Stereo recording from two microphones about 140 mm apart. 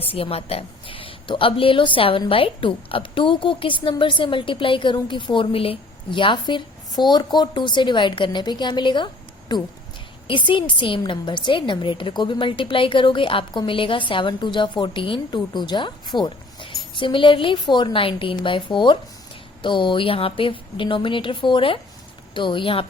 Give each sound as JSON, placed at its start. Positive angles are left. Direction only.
{"t": 0.0, "sound": "a woman's voice", "side_deg": 45}
{"t": 10.2, "sound": "a woman's voice", "side_deg": 35}